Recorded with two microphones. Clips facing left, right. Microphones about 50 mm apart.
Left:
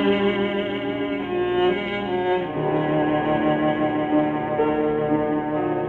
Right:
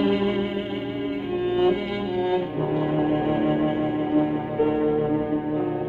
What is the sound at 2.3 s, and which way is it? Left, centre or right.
Brass instrument, left.